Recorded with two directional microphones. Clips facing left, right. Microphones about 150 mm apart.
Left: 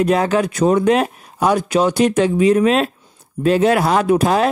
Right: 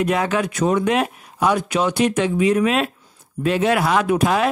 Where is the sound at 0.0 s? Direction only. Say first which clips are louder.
Left 4 dB; 35° left (ahead or behind).